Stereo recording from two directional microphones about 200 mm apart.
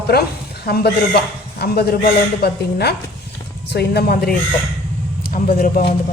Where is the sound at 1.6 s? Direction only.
50° left (ahead or behind).